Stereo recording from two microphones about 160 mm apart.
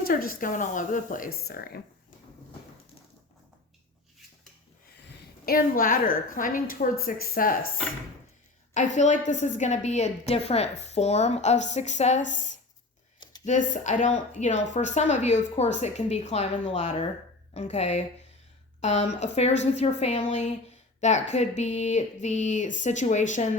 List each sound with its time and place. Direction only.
0.0 s a woman's voice: 65° left (ahead or behind)
5.5 s a woman's voice: 65° left (ahead or behind)
8.7 s a woman's voice: 45° left (ahead or behind)